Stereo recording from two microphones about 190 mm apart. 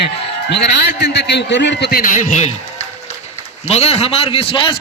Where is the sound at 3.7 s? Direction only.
35° left (ahead or behind).